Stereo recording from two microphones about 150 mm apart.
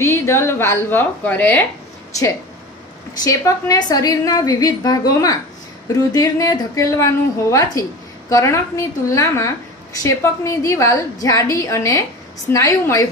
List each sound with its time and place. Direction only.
0.0 s a woman's voice: 20° left (ahead or behind)
3.3 s a woman's voice: 20° left (ahead or behind)